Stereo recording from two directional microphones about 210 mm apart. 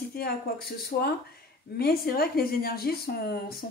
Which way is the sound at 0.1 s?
45° left (ahead or behind).